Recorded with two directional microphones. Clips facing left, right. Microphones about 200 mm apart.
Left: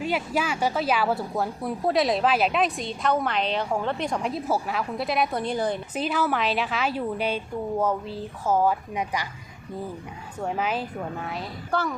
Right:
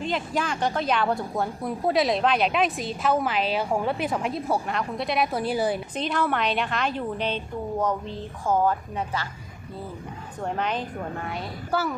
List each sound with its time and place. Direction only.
0.0 s a woman's voice: 10° left (ahead or behind)
6.0 s a woman's voice: 5° left (ahead or behind)
10.4 s a woman's voice: 5° left (ahead or behind)